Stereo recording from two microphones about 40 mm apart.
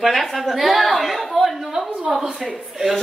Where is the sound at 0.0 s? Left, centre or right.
Centre.